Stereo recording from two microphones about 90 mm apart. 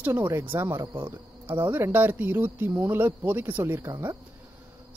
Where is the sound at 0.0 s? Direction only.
25° right (ahead or behind).